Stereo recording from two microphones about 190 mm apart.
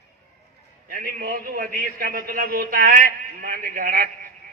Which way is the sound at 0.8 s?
45° right (ahead or behind).